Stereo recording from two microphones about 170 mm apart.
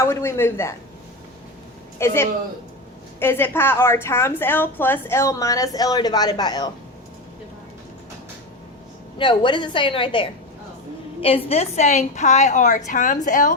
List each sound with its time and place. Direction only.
0.0 s a woman's voice: 15° left (ahead or behind)
2.0 s a woman's voice: 15° left (ahead or behind)
9.1 s a woman's voice: 30° left (ahead or behind); by 13.6 s 50° left (ahead or behind)